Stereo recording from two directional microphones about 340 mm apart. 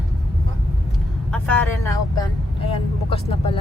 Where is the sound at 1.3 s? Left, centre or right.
Centre.